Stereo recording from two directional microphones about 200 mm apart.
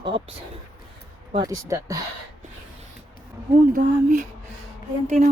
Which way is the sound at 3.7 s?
40° right (ahead or behind).